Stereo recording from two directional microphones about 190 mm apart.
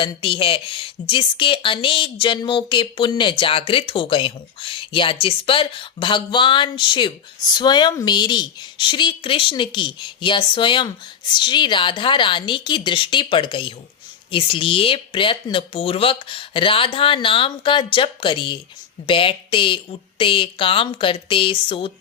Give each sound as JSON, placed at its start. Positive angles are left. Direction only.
{"t": 0.0, "sound": "a woman's voice", "side_deg": 25}